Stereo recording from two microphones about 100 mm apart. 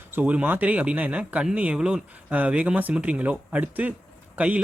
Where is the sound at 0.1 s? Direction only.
15° right (ahead or behind).